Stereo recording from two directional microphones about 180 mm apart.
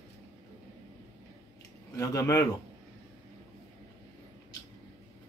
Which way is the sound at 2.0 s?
15° left (ahead or behind).